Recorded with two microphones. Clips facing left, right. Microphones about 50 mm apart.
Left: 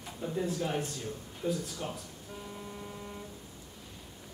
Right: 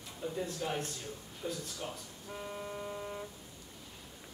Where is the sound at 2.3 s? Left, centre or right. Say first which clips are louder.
Right 3 dB; right.